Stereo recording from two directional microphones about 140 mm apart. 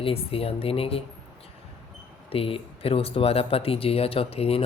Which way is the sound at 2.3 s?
40° left (ahead or behind).